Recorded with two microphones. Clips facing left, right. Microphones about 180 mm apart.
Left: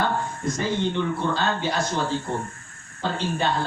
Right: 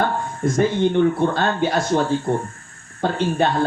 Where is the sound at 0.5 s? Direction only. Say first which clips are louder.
Right 8 dB; 55° right (ahead or behind).